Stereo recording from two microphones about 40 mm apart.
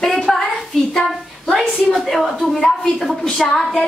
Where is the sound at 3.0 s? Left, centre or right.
Centre.